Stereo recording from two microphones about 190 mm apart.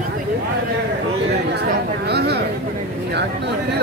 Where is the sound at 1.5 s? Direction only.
60° right (ahead or behind).